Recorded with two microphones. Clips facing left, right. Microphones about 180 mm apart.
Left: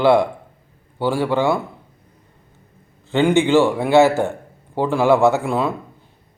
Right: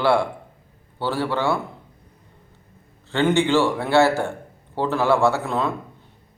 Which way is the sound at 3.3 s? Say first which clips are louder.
Left 5 dB; 15° left (ahead or behind).